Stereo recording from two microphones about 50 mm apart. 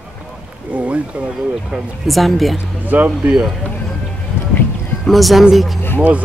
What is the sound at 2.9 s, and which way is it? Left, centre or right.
Speech, right.